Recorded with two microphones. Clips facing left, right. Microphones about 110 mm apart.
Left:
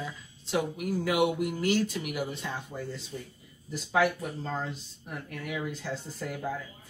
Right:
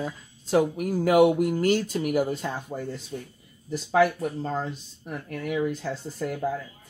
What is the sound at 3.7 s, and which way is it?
Speech, 35° right (ahead or behind).